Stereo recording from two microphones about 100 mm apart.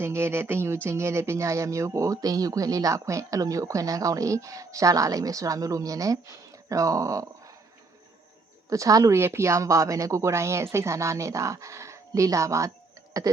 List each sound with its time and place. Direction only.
0.0 s speech: 25° right (ahead or behind)
8.7 s speech: 35° right (ahead or behind)